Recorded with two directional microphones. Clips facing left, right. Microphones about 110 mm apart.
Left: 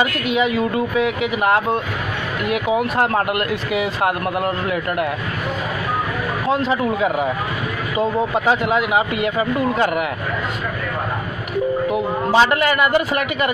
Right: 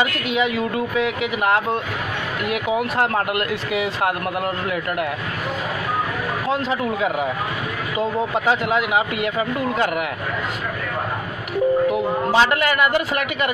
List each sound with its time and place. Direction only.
0.4 s speech: 35° left (ahead or behind)
7.0 s speech: 35° left (ahead or behind)
8.5 s speech: 35° left (ahead or behind)
12.3 s a man's voice: 30° left (ahead or behind)